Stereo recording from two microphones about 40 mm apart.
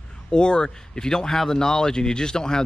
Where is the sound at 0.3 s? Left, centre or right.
Left.